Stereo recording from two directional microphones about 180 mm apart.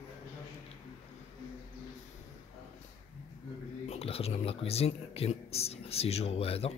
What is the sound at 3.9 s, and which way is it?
Speech, 35° left (ahead or behind).